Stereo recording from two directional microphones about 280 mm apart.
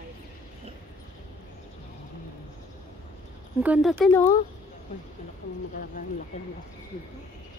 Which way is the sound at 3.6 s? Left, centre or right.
Centre.